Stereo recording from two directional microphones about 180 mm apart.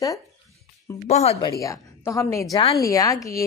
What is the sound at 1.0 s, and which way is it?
Speech, 35° left (ahead or behind).